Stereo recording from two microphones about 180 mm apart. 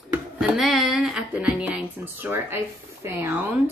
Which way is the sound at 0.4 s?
Centre (ahead or behind).